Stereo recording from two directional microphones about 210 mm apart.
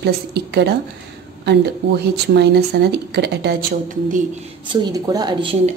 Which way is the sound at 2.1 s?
50° right (ahead or behind).